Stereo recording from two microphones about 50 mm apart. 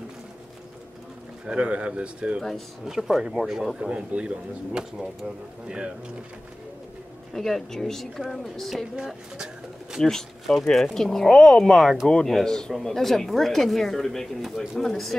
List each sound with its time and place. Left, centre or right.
1.4 s speech: right
2.8 s speech: centre
3.9 s speech: right
7.3 s speech: centre
8.9 s speech: centre
10.0 s a man's voice: centre